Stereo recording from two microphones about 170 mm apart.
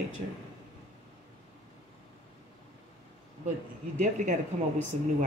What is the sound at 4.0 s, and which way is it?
Speech, 45° right (ahead or behind).